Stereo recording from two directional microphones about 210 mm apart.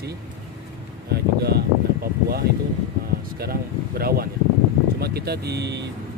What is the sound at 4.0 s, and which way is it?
Speech, 45° right (ahead or behind).